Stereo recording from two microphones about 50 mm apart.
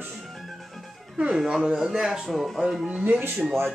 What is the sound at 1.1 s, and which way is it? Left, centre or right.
Speech, right.